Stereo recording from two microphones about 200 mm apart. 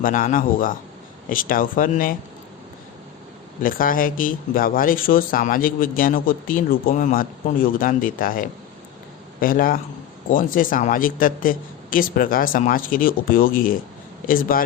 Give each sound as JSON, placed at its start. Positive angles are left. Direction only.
{"t": 0.0, "sound": "speech", "side_deg": 45}
{"t": 3.6, "sound": "speech", "side_deg": 45}